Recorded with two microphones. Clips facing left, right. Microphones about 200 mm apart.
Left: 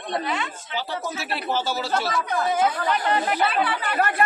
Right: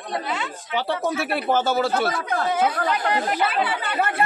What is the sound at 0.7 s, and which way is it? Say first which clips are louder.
A man's voice: right 7 dB; 55° right (ahead or behind).